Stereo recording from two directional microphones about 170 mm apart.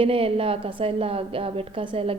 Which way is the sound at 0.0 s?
35° right (ahead or behind).